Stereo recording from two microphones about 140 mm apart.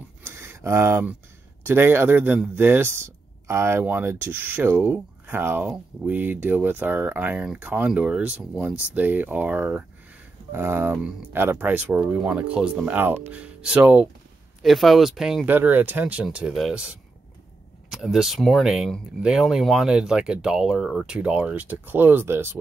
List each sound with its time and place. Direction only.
0.2 s a sound: 15° right (ahead or behind)
1.6 s speech: 15° right (ahead or behind)
14.6 s speech: centre (ahead or behind)
15.4 s speech: 15° right (ahead or behind)